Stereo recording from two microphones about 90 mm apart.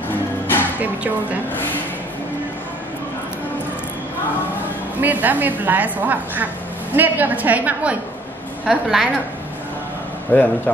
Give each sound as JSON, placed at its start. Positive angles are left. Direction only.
{"t": 0.7, "sound": "music", "side_deg": -15}
{"t": 5.0, "sound": "a woman's voice", "side_deg": -20}
{"t": 10.3, "sound": "speech", "side_deg": 20}